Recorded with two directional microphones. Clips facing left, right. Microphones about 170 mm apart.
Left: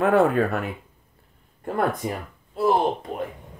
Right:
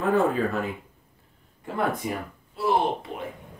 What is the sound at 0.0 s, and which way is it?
Speech, 70° left (ahead or behind).